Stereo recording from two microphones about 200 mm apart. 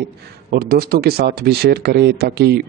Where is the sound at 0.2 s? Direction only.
50° right (ahead or behind).